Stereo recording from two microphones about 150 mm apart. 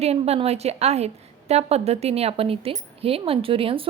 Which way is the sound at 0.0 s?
45° right (ahead or behind).